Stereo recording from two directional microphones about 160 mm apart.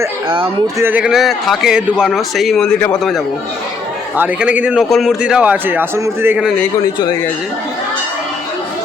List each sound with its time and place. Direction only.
0.8 s a man's voice: 10° right (ahead or behind); by 3.2 s 5° left (ahead or behind)
4.2 s a man's voice: 10° right (ahead or behind)
6.7 s speech: 25° left (ahead or behind)